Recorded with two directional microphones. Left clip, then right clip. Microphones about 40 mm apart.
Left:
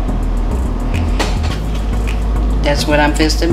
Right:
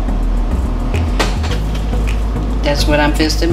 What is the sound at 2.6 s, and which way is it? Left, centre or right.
Speech, centre.